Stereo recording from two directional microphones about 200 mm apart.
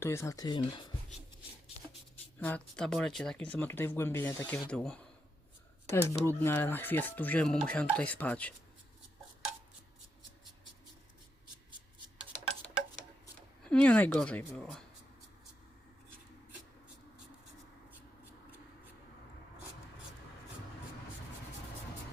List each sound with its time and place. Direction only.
0.0 s speech: 15° left (ahead or behind)
2.4 s speech: 5° left (ahead or behind)
13.7 s speech: 5° left (ahead or behind)